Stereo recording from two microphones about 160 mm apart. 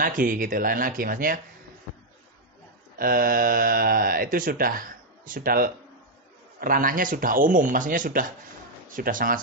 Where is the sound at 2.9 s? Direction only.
65° right (ahead or behind).